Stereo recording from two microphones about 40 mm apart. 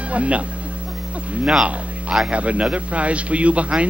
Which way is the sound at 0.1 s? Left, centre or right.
Right.